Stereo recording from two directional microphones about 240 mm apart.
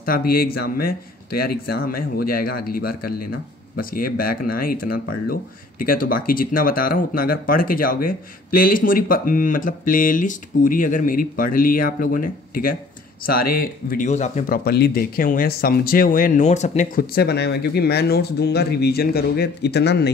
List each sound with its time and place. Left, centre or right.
0.0 s speech: left